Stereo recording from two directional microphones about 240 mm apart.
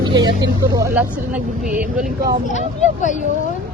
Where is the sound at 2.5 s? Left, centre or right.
Left.